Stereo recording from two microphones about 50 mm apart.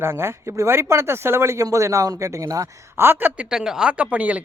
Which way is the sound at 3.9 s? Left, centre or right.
Right.